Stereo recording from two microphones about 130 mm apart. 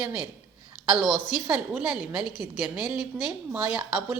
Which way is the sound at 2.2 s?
35° left (ahead or behind).